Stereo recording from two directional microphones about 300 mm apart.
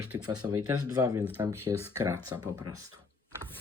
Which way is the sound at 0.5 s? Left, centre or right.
Right.